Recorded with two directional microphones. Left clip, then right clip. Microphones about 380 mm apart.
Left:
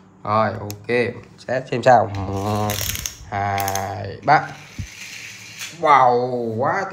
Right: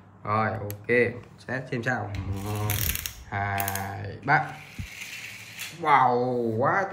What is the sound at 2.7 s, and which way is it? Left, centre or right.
Mechanisms, centre.